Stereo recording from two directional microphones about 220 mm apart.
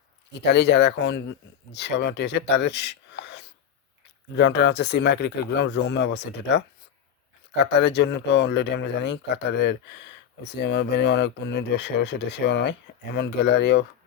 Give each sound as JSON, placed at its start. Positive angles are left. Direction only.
{"t": 0.4, "sound": "speech", "side_deg": 50}
{"t": 7.6, "sound": "speech", "side_deg": 50}